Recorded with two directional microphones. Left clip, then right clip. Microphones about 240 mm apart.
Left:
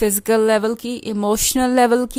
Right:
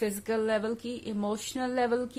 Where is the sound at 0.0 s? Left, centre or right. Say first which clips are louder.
Left 13 dB; left.